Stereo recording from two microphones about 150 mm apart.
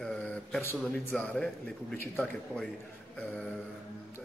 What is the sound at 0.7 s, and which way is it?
Speech, 5° left (ahead or behind).